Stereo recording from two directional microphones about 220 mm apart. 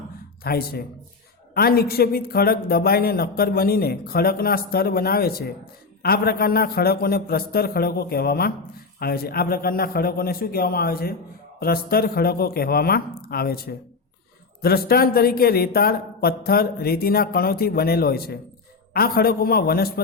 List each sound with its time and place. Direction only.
0.4 s speech: 45° left (ahead or behind)